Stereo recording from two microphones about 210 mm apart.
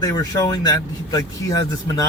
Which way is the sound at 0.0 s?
15° left (ahead or behind).